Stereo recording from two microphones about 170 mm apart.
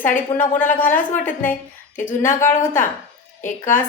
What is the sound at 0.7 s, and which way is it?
Speech, 10° left (ahead or behind).